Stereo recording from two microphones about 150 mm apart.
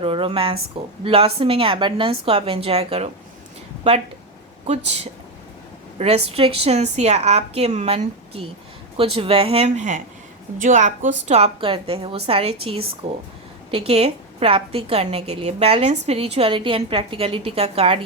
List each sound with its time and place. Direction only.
0.0 s a woman's voice: 40° right (ahead or behind)